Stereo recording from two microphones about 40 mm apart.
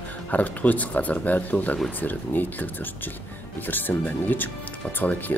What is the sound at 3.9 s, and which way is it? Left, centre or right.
Speech, left.